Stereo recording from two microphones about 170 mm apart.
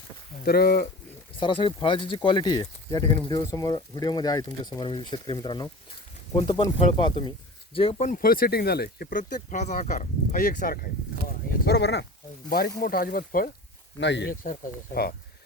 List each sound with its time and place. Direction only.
0.4 s speech: 60° left (ahead or behind)
1.4 s speech: 30° left (ahead or behind); by 10.8 s 55° left (ahead or behind)
11.3 s a sound: 75° left (ahead or behind)
12.5 s speech: 60° left (ahead or behind)
14.0 s speech: 90° left
14.4 s speech: 60° left (ahead or behind)